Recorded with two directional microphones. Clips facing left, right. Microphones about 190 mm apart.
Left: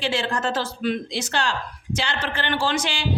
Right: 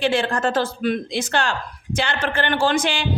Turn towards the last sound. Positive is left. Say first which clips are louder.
# right 4 dB
turn(degrees=-55)  # may be behind; listen again after turning